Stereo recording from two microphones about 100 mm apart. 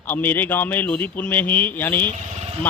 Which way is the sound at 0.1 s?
20° left (ahead or behind).